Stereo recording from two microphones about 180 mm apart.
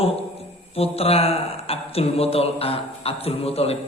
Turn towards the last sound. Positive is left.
turn(degrees=35)  # may be behind; listen again after turning